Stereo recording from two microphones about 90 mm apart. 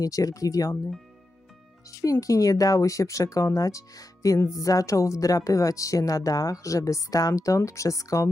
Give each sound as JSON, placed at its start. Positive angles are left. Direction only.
{"t": 0.0, "sound": "speech", "side_deg": 40}
{"t": 2.2, "sound": "speech", "side_deg": 40}